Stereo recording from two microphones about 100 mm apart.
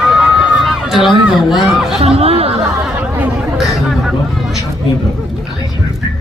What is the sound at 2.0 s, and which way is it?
Chatter, 80° right.